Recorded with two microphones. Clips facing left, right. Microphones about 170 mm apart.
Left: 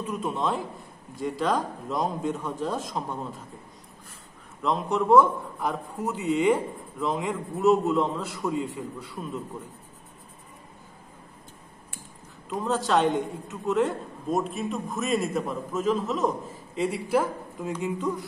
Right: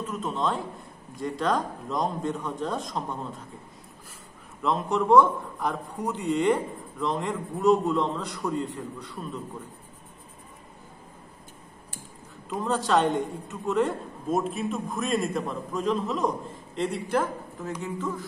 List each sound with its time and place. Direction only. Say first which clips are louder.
0.0 s a man's voice: even; 10° left (ahead or behind)
4.6 s a man's voice: even; centre (ahead or behind)
12.4 s a man's voice: even; centre (ahead or behind); by 18.2 s 15° left (ahead or behind)